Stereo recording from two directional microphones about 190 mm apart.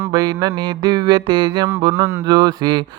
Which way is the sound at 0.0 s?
25° right (ahead or behind).